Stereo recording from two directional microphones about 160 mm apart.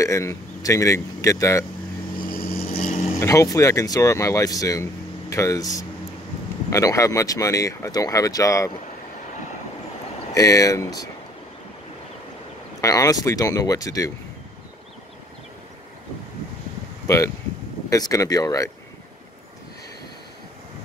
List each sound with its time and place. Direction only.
0.0 s speech: 20° left (ahead or behind)
2.7 s vehicle: 45° left (ahead or behind)
3.2 s speech: 20° left (ahead or behind)
10.3 s speech: 20° left (ahead or behind)
12.8 s speech: 20° left (ahead or behind)
17.1 s speech: 20° left (ahead or behind)